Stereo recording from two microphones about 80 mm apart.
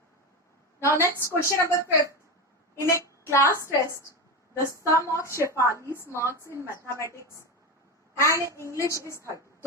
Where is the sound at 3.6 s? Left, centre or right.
Right.